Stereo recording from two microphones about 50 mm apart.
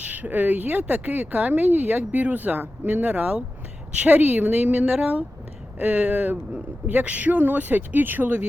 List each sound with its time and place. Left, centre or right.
0.0 s speech: right